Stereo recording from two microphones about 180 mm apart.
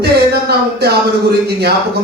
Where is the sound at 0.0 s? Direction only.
65° right (ahead or behind).